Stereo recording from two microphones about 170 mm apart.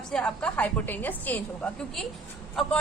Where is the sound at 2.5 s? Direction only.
5° left (ahead or behind).